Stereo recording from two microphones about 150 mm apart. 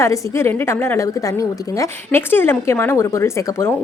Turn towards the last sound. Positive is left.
turn(degrees=15)  # may be behind; listen again after turning